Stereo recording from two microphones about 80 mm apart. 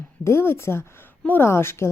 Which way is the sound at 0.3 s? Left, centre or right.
Left.